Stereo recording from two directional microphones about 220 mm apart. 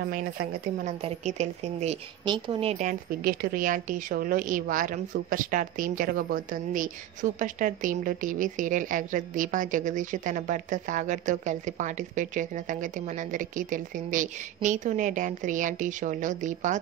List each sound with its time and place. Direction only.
0.0 s a woman's voice: 40° right (ahead or behind)
1.0 s a woman's voice: 30° right (ahead or behind)